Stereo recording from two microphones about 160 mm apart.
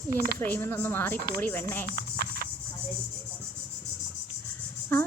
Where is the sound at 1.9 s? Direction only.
70° right (ahead or behind).